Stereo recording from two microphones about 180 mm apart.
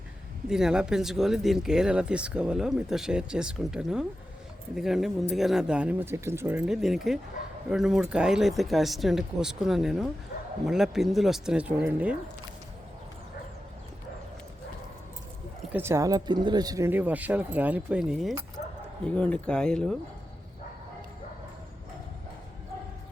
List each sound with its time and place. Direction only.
0.4 s speech: 5° right (ahead or behind)
15.7 s speech: 15° right (ahead or behind); by 20.0 s 5° left (ahead or behind)